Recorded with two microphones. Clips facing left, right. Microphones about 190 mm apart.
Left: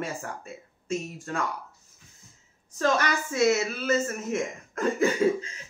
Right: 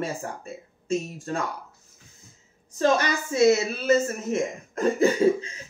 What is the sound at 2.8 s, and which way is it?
A woman's voice, 30° right (ahead or behind).